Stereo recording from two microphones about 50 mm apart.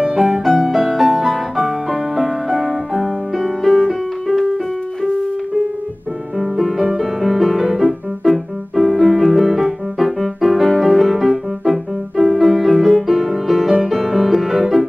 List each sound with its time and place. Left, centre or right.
0.0 s music: centre
6.3 s music: centre